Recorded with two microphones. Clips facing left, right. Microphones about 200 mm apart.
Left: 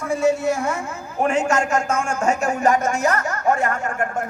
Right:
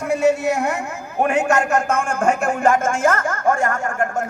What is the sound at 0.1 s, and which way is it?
A woman's voice, 65° right (ahead or behind).